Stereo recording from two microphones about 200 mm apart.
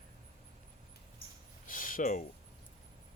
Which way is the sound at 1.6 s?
40° left (ahead or behind).